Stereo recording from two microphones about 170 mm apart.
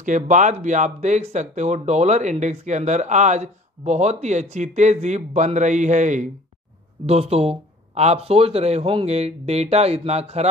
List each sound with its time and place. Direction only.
0.0 s speech: 45° right (ahead or behind)